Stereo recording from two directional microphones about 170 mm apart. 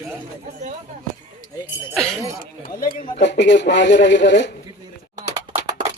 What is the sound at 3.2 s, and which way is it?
Speech, 90° left.